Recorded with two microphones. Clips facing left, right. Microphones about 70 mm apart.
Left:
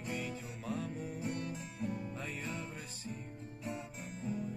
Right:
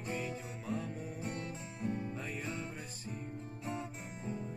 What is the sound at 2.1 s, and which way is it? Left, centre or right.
Music, centre.